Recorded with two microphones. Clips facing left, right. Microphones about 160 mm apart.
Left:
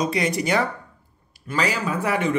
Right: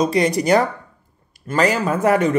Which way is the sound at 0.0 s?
35° right (ahead or behind).